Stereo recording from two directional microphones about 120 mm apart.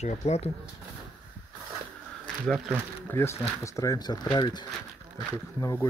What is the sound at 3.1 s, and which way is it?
Speech, 20° left (ahead or behind).